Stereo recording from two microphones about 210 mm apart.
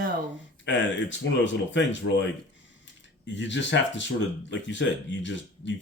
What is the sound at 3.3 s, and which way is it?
Speech, 60° left (ahead or behind).